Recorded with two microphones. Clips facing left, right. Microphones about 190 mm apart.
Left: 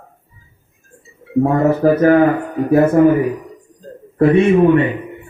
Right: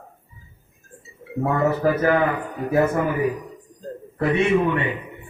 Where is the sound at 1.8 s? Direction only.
40° left (ahead or behind).